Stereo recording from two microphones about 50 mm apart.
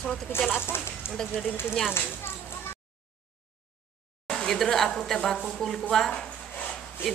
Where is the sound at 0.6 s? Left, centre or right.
Left.